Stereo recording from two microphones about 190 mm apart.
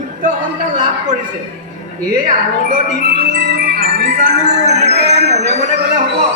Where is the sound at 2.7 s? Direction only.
55° right (ahead or behind).